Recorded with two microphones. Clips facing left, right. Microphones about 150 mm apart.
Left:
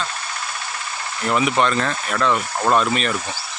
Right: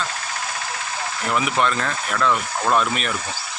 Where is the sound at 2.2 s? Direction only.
15° left (ahead or behind).